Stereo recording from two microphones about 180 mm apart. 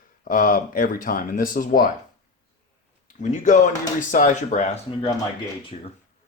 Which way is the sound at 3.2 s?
45° left (ahead or behind).